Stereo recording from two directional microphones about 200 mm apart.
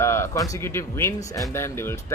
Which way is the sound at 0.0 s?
15° left (ahead or behind).